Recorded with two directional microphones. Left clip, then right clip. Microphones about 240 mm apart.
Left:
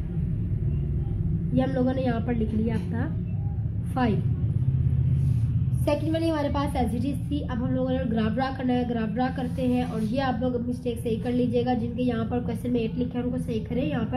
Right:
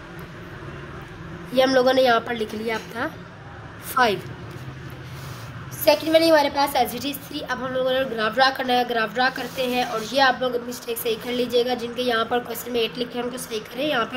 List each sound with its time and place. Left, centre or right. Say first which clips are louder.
1.5 s a woman's voice: right 9 dB; right
5.9 s a woman's voice: right 10 dB; right